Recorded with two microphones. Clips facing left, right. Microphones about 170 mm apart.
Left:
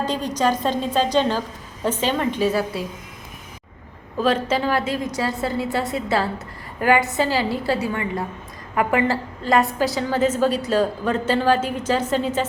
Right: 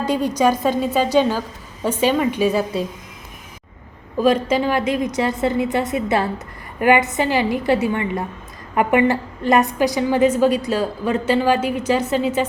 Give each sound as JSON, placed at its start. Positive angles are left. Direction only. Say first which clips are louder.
{"t": 0.0, "sound": "a woman's voice", "louder": "right 4 dB", "side_deg": -10}
{"t": 4.2, "sound": "a woman's voice", "louder": "right 3 dB", "side_deg": -10}